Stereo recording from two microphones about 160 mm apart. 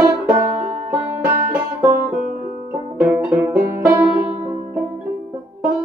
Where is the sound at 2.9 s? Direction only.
10° right (ahead or behind).